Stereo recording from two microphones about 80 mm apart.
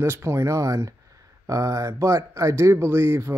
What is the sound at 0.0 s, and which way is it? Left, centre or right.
Speech, right.